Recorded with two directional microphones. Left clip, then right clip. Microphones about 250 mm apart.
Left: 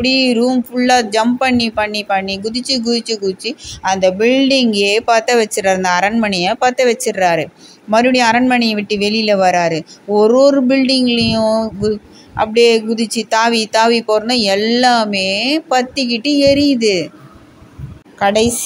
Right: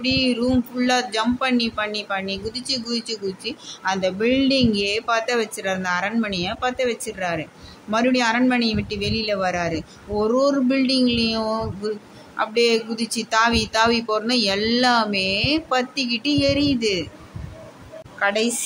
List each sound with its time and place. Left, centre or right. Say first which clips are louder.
0.0 s speech: left 8 dB; left
18.2 s speech: left 8 dB; centre